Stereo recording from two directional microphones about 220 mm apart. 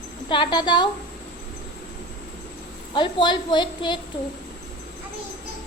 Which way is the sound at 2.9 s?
20° left (ahead or behind).